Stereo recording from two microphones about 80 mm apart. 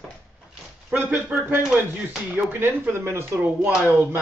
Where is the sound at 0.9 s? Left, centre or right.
Right.